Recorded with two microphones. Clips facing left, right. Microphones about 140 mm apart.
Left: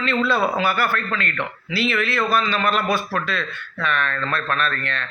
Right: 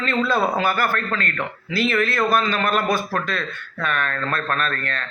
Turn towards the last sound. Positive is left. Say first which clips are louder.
# even
turn(degrees=-40)  # may be behind; listen again after turning